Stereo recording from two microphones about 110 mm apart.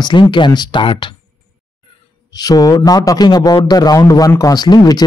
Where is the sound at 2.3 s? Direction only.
35° left (ahead or behind).